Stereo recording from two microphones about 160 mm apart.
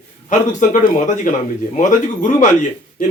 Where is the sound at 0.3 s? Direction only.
50° left (ahead or behind).